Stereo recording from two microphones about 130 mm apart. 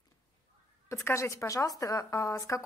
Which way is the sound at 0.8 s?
20° left (ahead or behind).